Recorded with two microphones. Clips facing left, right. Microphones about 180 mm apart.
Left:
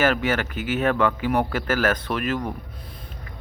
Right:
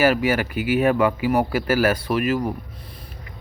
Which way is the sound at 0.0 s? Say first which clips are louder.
Right 3 dB; 10° right (ahead or behind).